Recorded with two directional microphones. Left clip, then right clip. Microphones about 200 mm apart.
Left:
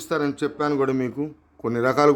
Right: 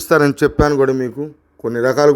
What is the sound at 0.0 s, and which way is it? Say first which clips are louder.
Speech: right 11 dB; 35° right (ahead or behind).